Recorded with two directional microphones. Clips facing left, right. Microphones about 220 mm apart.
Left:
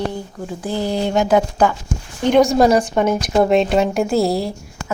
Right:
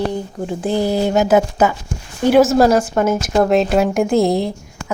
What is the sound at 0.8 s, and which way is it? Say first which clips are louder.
Speech: right 2 dB; 5° right (ahead or behind).